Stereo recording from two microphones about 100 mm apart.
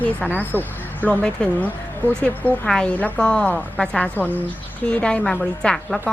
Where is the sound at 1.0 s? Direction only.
10° left (ahead or behind).